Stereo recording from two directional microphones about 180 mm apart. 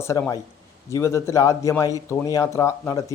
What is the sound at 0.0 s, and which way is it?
A man's voice, 15° left (ahead or behind).